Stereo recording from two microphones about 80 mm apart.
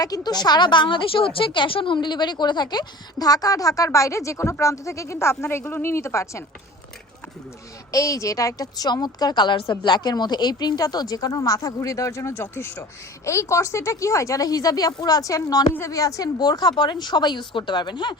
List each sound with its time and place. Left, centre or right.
0.0 s a woman's voice: left
7.9 s a woman's voice: left